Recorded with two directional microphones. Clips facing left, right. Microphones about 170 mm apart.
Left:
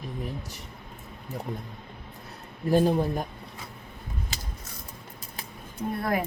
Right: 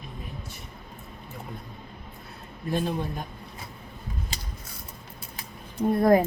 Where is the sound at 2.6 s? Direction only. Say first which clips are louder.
Left 6 dB; 40° left (ahead or behind).